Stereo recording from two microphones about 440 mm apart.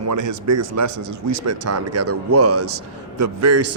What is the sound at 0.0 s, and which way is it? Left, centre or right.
A man's voice, right.